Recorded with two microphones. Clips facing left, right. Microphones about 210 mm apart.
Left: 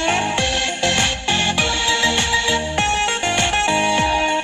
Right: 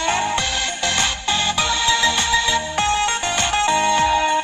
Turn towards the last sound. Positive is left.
turn(degrees=20)  # may be behind; listen again after turning